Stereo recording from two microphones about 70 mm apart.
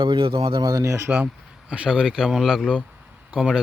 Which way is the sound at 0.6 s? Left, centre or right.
Right.